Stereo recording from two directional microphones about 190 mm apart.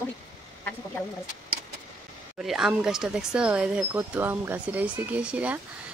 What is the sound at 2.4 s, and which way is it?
Speech, 5° right (ahead or behind).